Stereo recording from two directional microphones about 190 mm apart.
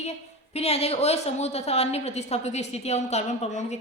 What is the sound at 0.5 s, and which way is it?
A woman's voice, 35° left (ahead or behind).